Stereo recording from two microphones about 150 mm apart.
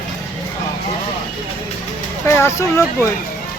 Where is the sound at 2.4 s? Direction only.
20° left (ahead or behind).